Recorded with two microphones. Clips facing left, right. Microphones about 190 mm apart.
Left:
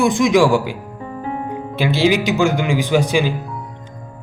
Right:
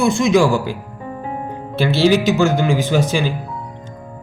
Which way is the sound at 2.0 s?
15° left (ahead or behind).